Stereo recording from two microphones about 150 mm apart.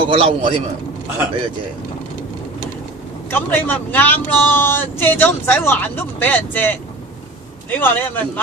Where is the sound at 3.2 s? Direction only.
15° left (ahead or behind).